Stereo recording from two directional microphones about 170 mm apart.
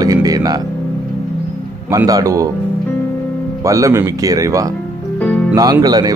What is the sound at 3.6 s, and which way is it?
Speech, 20° right (ahead or behind).